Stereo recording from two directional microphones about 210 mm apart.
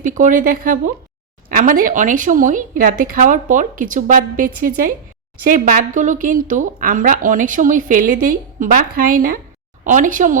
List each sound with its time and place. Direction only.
0.0 s a woman's voice: 35° right (ahead or behind)